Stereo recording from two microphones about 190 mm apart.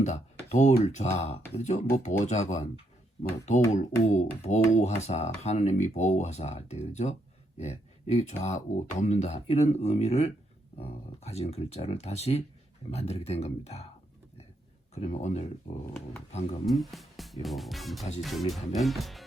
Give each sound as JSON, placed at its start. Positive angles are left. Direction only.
{"t": 0.0, "sound": "speech", "side_deg": 40}
{"t": 3.7, "sound": "speech", "side_deg": 35}
{"t": 14.9, "sound": "speech", "side_deg": 35}
{"t": 16.6, "sound": "speech", "side_deg": 0}